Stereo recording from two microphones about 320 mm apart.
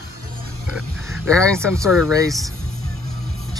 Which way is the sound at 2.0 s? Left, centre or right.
Centre.